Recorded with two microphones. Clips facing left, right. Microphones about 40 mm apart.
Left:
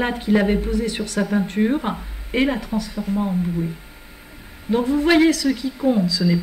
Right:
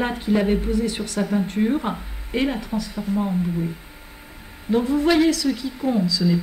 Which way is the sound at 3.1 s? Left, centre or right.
Centre.